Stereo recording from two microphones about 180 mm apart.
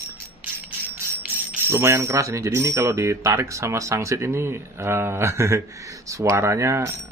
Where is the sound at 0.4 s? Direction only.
10° right (ahead or behind).